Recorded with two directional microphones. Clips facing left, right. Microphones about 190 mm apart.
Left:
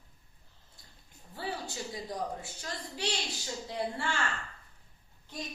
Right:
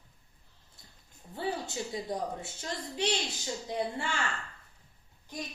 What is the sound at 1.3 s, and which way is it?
A woman's voice, 20° right (ahead or behind).